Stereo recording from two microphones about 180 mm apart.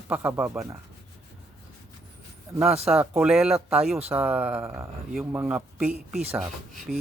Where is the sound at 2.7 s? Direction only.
35° right (ahead or behind).